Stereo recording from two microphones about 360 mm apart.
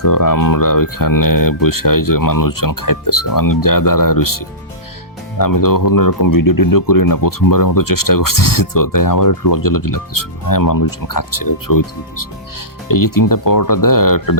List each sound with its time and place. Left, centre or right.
0.0 s speech: left